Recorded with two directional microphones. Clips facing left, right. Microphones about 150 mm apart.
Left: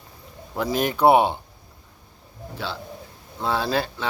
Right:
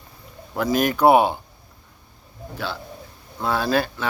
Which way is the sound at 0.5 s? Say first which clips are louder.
Right 3 dB; 25° left (ahead or behind).